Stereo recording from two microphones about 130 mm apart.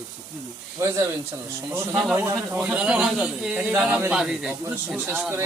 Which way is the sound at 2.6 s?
10° right (ahead or behind).